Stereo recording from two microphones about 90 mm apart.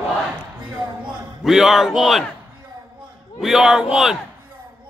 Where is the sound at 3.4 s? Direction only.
5° right (ahead or behind).